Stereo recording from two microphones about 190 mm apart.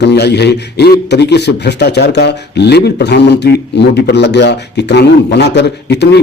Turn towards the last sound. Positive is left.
turn(degrees=65)  # may be behind; listen again after turning